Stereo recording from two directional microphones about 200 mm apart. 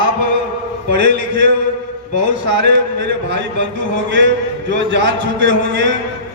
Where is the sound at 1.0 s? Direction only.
60° right (ahead or behind).